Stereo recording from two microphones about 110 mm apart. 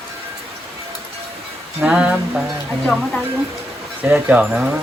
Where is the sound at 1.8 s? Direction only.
10° right (ahead or behind).